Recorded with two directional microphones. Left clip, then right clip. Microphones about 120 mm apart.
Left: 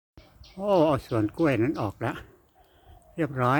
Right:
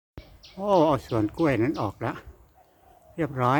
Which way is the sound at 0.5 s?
15° left (ahead or behind).